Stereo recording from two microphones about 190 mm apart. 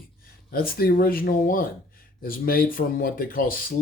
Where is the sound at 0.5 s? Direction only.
50° left (ahead or behind).